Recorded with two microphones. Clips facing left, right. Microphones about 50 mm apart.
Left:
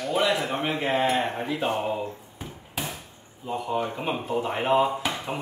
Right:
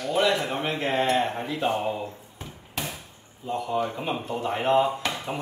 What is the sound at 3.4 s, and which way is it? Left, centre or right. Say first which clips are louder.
Speech: right 1 dB; centre.